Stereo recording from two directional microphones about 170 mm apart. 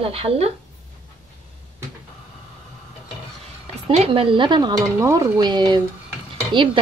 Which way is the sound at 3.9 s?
35° right (ahead or behind).